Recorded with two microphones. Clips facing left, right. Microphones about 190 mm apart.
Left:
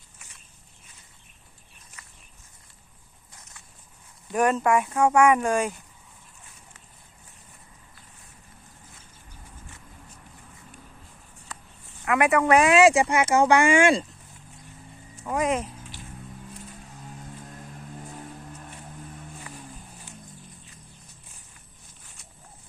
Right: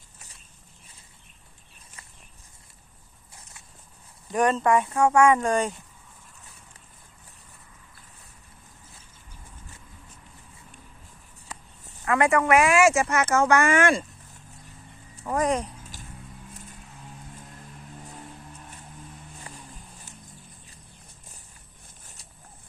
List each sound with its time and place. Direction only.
4.3 s speech: 5° left (ahead or behind)
12.0 s speech: 15° left (ahead or behind)
15.3 s speech: 5° left (ahead or behind)